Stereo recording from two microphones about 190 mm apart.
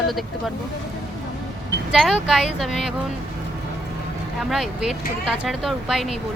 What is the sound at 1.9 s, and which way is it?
Speech, centre (ahead or behind).